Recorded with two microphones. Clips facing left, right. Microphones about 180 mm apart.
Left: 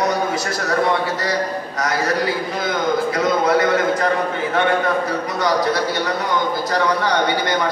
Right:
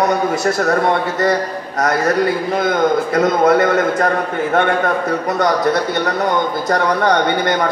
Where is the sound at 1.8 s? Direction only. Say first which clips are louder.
Right 6 dB; 55° right (ahead or behind).